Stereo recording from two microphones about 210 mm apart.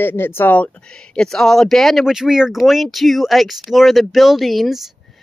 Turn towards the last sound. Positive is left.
turn(degrees=0)  # may be behind; listen again after turning